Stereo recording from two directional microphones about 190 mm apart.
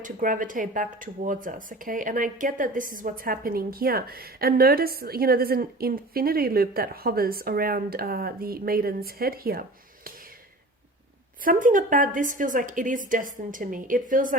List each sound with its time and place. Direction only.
0.0 s speech: 45° right (ahead or behind)
11.4 s speech: 45° right (ahead or behind)